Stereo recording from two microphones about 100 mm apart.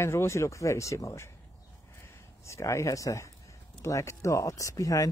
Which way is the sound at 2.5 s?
30° left (ahead or behind).